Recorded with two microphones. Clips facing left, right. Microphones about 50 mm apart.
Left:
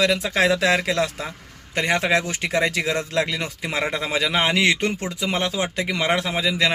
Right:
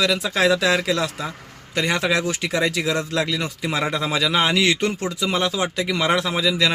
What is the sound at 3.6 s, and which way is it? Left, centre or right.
A man's voice, left.